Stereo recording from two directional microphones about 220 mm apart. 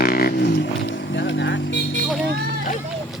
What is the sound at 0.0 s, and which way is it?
Music, 45° left (ahead or behind).